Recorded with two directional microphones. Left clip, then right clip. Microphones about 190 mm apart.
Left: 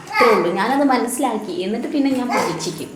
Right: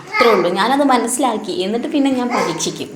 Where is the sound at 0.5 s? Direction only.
20° right (ahead or behind).